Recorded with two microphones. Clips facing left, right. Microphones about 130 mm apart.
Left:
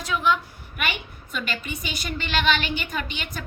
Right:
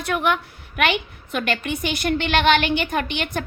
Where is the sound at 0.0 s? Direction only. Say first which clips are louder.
Right 2 dB; 60° right (ahead or behind).